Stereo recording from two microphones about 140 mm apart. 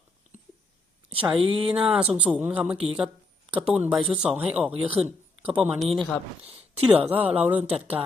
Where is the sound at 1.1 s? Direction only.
40° right (ahead or behind).